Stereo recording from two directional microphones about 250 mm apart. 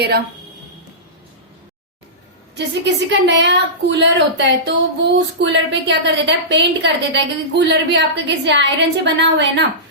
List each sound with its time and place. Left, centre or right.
2.6 s a woman's voice: right